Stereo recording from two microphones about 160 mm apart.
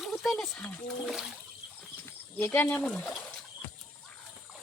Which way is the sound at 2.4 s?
10° left (ahead or behind).